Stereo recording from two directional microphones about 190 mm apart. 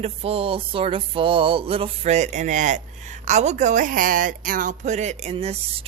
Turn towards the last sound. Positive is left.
turn(degrees=-30)  # may be behind; listen again after turning